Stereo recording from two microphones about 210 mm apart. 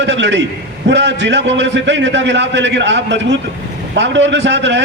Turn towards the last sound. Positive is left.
turn(degrees=-60)  # may be behind; listen again after turning